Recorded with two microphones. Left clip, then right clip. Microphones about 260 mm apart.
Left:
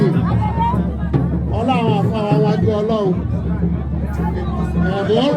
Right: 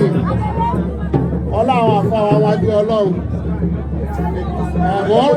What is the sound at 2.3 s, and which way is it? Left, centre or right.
Music, right.